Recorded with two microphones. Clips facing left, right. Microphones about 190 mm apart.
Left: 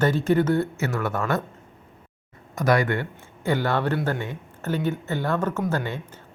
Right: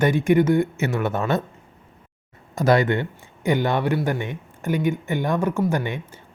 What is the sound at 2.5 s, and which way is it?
Speech, 25° right (ahead or behind).